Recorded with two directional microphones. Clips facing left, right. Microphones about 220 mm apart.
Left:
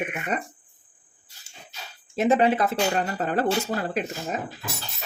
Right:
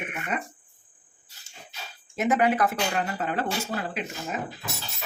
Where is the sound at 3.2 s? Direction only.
40° left (ahead or behind).